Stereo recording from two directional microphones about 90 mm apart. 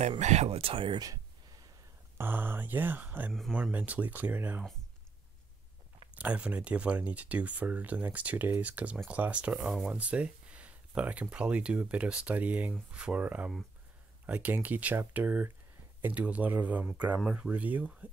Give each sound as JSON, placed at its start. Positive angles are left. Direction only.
{"t": 0.1, "sound": "speech", "side_deg": -90}
{"t": 0.9, "sound": "speech", "side_deg": -45}
{"t": 2.1, "sound": "speech", "side_deg": -25}
{"t": 6.1, "sound": "speech", "side_deg": -15}